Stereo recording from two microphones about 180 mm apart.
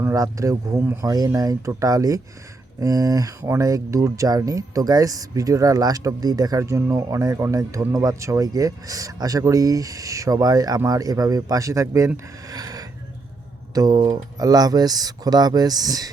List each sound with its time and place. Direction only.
0.0 s speech: 15° right (ahead or behind)